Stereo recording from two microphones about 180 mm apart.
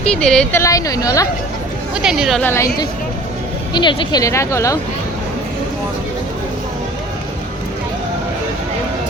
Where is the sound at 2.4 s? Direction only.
15° left (ahead or behind).